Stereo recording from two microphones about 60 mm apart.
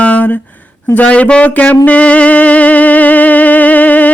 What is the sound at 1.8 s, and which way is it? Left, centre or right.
Music, left.